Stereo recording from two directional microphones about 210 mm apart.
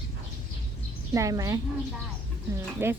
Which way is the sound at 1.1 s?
15° right (ahead or behind).